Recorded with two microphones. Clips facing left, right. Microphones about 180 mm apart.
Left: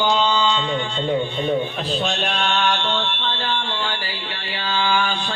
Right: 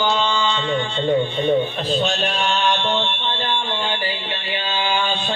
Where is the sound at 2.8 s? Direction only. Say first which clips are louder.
Right 2 dB; 15° right (ahead or behind).